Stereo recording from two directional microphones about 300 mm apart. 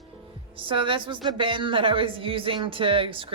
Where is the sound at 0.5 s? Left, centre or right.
Centre.